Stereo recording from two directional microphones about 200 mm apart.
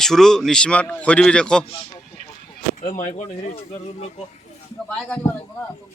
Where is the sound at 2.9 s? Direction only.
35° left (ahead or behind).